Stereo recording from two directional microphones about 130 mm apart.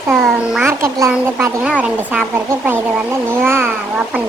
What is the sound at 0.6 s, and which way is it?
Speech, 20° right (ahead or behind).